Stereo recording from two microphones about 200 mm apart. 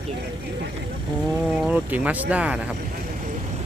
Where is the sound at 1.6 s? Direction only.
5° right (ahead or behind).